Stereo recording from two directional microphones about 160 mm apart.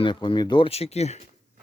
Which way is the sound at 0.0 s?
30° left (ahead or behind).